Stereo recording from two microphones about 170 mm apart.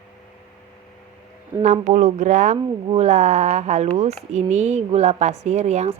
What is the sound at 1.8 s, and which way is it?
A woman's voice, 45° right (ahead or behind).